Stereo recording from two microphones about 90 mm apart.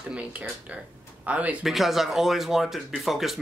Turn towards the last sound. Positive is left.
turn(degrees=-5)  # may be behind; listen again after turning